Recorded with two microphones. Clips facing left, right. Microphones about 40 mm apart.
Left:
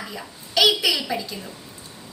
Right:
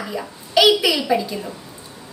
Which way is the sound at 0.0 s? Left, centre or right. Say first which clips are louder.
Right 7 dB; centre.